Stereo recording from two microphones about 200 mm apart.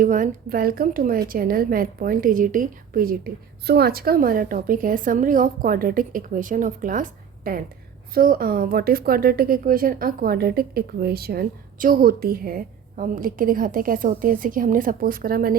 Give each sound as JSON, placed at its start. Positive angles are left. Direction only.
{"t": 0.0, "sound": "a woman's voice", "side_deg": -40}